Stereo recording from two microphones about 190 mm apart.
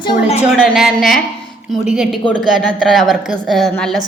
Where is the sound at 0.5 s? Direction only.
Centre (ahead or behind).